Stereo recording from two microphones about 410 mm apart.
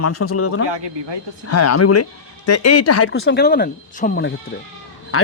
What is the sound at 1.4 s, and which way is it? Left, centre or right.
Speech, left.